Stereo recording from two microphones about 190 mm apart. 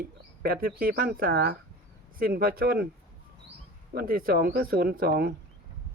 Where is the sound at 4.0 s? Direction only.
50° right (ahead or behind).